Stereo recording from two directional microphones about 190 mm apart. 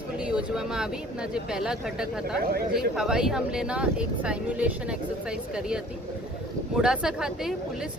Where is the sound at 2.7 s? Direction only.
Centre (ahead or behind).